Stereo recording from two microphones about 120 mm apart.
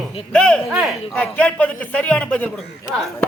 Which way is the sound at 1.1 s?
10° left (ahead or behind).